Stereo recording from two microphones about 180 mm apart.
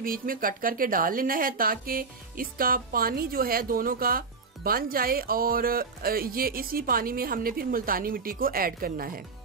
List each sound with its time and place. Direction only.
0.0 s speech: 50° right (ahead or behind)